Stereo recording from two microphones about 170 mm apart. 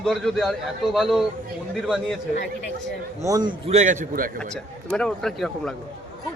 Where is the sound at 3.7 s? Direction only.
45° right (ahead or behind).